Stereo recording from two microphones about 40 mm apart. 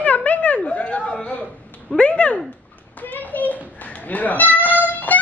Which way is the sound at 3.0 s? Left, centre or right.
Left.